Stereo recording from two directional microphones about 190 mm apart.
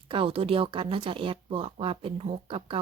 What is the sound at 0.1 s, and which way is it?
Speech, 30° right (ahead or behind).